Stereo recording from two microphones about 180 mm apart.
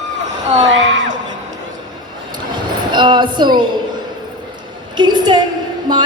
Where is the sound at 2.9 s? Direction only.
25° right (ahead or behind).